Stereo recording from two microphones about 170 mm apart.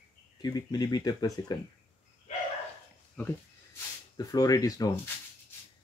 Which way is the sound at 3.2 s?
10° left (ahead or behind).